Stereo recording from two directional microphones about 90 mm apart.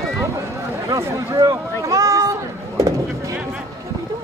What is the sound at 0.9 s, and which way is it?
Speech, 45° right (ahead or behind).